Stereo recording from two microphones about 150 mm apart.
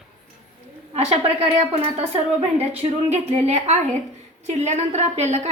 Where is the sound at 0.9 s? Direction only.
45° right (ahead or behind).